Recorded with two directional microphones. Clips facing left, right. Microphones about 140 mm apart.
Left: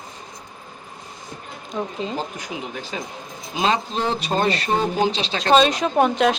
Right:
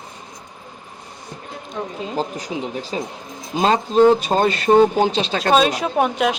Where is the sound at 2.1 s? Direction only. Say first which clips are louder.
Right 4 dB; 35° right (ahead or behind).